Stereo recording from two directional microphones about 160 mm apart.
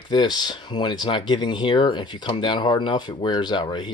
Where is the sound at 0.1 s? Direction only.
30° left (ahead or behind).